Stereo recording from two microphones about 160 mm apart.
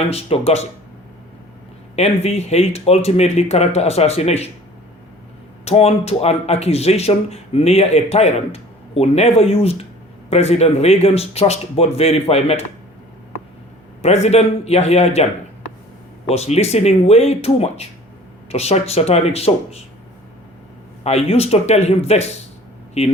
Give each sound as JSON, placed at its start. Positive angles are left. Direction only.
{"t": 0.1, "sound": "speech", "side_deg": 40}
{"t": 2.0, "sound": "speech", "side_deg": 40}
{"t": 5.6, "sound": "speech", "side_deg": 40}
{"t": 14.0, "sound": "speech", "side_deg": 40}
{"t": 16.3, "sound": "speech", "side_deg": 40}
{"t": 21.0, "sound": "speech", "side_deg": 40}